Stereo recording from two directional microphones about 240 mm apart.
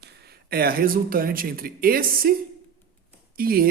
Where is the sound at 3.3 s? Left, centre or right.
Right.